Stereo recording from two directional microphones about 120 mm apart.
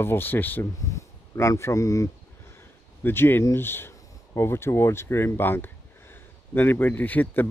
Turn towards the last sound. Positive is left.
turn(degrees=15)  # may be behind; listen again after turning